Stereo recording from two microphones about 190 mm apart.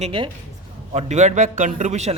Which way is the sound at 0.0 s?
25° right (ahead or behind).